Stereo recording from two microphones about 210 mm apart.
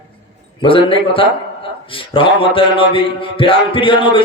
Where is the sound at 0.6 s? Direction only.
25° left (ahead or behind).